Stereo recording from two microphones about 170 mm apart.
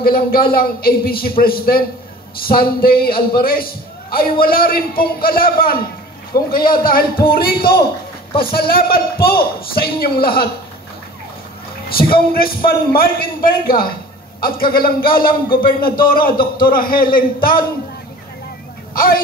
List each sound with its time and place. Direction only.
0.0 s a man's voice: 60° left (ahead or behind)
12.0 s a man's voice: 60° left (ahead or behind)
18.9 s a man's voice: 55° left (ahead or behind)